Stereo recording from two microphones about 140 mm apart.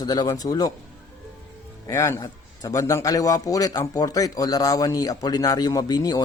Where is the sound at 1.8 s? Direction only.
20° left (ahead or behind).